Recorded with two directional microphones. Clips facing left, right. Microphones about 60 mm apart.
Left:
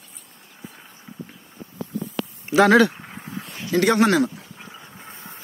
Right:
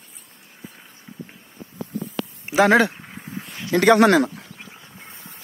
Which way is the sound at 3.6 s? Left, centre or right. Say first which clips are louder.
Right 3 dB; right.